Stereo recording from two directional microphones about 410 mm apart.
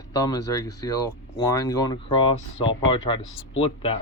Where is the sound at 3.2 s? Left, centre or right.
Left.